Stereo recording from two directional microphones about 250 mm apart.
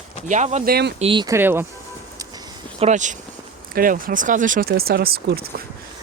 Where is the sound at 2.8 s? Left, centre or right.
Right.